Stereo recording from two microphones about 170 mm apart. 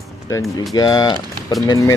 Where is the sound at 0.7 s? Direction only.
20° left (ahead or behind).